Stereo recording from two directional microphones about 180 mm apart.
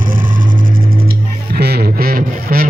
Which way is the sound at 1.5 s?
60° right (ahead or behind).